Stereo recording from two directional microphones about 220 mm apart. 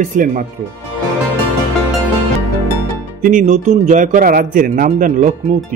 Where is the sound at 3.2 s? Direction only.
35° right (ahead or behind).